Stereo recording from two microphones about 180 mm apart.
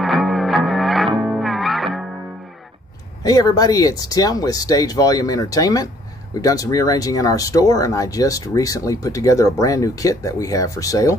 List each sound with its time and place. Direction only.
0.0 s music: centre (ahead or behind)
3.3 s speech: 20° left (ahead or behind)